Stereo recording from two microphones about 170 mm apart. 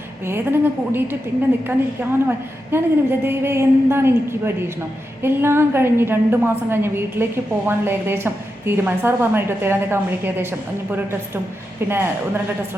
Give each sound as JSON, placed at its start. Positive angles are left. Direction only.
{"t": 0.3, "sound": "a woman's voice", "side_deg": -15}